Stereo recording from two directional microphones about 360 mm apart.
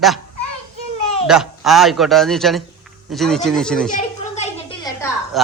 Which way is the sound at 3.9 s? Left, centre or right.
Centre.